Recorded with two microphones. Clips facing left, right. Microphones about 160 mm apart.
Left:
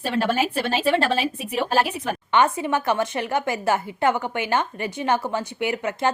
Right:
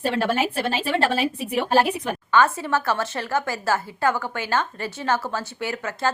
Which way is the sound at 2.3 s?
20° left (ahead or behind).